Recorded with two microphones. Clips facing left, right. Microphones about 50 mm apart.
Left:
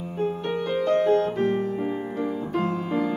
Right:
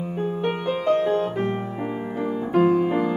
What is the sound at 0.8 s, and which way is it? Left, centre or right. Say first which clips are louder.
Music: even; right.